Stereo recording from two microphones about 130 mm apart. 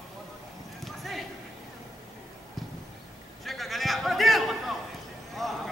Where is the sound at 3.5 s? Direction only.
Centre (ahead or behind).